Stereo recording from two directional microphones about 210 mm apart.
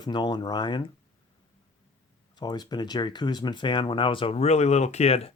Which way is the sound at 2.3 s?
20° left (ahead or behind).